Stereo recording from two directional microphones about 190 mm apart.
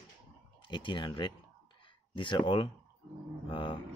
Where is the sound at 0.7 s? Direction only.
25° left (ahead or behind).